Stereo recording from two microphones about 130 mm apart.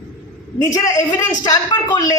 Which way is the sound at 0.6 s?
25° left (ahead or behind).